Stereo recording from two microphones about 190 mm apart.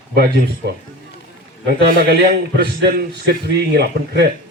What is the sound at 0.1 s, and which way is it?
A man's voice, 60° right (ahead or behind).